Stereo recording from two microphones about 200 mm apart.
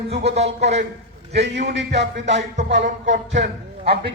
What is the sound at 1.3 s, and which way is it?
A man's voice, 60° right (ahead or behind).